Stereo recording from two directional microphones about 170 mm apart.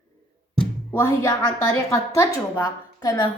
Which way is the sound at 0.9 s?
15° left (ahead or behind).